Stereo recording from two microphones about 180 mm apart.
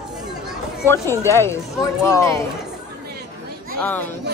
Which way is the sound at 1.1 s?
15° left (ahead or behind).